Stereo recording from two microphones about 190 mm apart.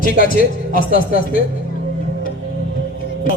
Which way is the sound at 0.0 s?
50° left (ahead or behind).